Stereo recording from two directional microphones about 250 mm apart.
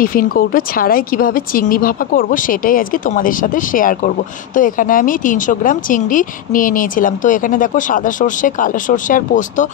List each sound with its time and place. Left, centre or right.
0.0 s speech: left